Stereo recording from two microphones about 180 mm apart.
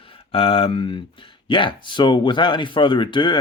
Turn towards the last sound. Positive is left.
turn(degrees=25)  # may be behind; listen again after turning